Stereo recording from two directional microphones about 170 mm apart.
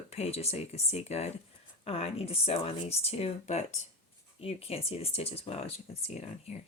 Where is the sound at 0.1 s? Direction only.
40° left (ahead or behind).